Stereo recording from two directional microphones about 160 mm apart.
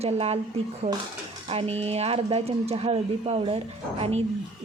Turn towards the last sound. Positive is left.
turn(degrees=-40)  # may be behind; listen again after turning